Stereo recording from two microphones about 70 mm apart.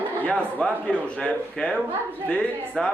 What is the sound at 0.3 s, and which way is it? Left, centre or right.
A man's voice, centre.